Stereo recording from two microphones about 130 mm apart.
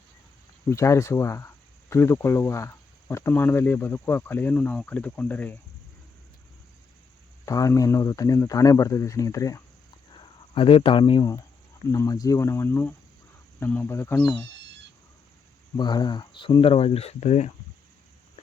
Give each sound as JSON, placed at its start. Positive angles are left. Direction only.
{"t": 0.7, "sound": "speech", "side_deg": 25}
{"t": 7.4, "sound": "speech", "side_deg": 25}
{"t": 10.1, "sound": "a sound", "side_deg": 40}
{"t": 11.9, "sound": "speech", "side_deg": 25}
{"t": 15.8, "sound": "speech", "side_deg": 35}